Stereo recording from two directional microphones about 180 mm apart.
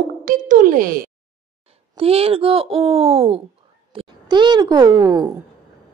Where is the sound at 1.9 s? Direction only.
35° right (ahead or behind).